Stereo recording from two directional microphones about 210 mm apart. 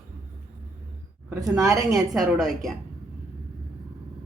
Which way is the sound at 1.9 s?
Centre (ahead or behind).